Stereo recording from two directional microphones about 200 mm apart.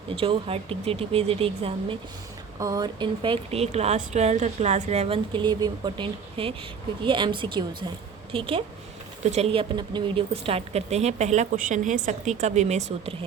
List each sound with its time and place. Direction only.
0.2 s speech: 30° right (ahead or behind)